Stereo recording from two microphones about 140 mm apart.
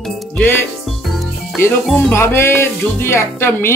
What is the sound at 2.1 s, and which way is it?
Speech, 20° left (ahead or behind).